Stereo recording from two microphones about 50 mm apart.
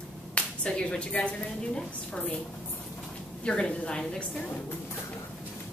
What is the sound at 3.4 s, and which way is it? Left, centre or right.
Speech, centre.